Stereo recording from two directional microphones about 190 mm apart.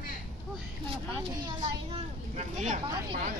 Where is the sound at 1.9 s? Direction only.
35° right (ahead or behind).